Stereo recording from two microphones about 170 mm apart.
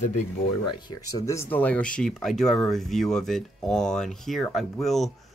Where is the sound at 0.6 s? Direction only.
25° left (ahead or behind).